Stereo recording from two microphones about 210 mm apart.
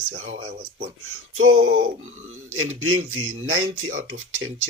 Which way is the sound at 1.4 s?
75° right (ahead or behind).